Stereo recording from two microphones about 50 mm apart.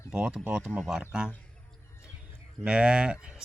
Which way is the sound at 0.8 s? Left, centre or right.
Centre.